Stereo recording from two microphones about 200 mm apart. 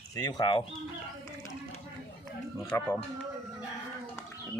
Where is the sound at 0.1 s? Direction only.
20° left (ahead or behind).